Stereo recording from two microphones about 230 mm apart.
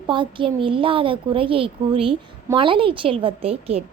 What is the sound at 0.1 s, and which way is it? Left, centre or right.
A woman's voice, right.